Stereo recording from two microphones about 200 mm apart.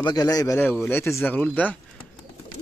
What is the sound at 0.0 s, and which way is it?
Speech, 20° left (ahead or behind).